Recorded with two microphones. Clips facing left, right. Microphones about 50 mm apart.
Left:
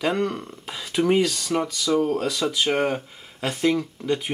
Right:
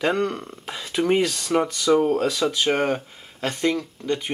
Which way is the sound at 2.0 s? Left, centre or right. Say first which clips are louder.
Right 3 dB; centre.